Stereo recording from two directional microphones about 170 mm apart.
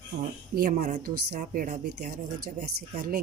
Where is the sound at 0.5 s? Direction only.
55° right (ahead or behind).